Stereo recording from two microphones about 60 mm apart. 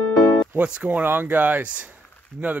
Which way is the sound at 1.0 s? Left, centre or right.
Right.